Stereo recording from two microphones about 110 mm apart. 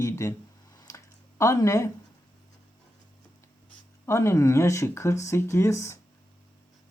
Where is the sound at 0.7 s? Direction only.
30° left (ahead or behind).